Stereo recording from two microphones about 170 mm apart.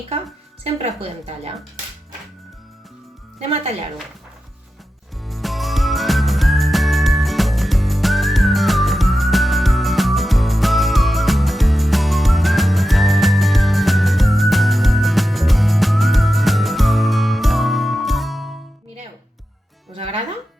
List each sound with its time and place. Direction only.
0.6 s speech: 35° right (ahead or behind)
3.3 s speech: 35° right (ahead or behind)
5.2 s music: centre (ahead or behind)
20.0 s music: 35° right (ahead or behind)